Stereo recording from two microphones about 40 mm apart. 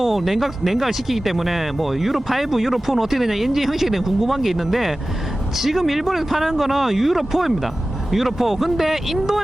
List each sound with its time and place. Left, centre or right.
0.0 s speech: centre